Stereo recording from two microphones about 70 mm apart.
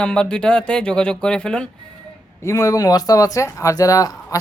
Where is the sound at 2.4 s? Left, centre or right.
Left.